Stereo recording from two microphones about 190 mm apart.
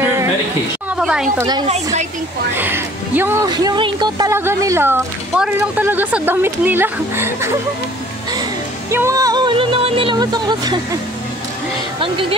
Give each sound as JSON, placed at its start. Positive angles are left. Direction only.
{"t": 0.8, "sound": "a sound", "side_deg": -5}
{"t": 2.5, "sound": "speech", "side_deg": -10}
{"t": 3.4, "sound": "speech", "side_deg": -20}
{"t": 8.9, "sound": "speech", "side_deg": -15}
{"t": 12.0, "sound": "speech", "side_deg": -25}